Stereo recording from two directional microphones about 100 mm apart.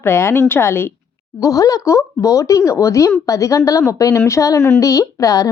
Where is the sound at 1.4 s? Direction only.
35° left (ahead or behind).